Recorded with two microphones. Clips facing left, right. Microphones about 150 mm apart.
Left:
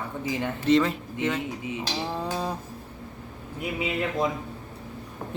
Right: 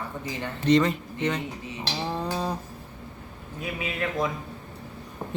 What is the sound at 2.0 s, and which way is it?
Livestock, 5° left (ahead or behind).